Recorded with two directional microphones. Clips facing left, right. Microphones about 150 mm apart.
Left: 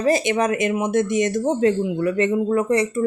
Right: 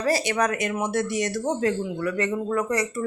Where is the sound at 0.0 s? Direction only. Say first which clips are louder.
Left 4 dB; 20° left (ahead or behind).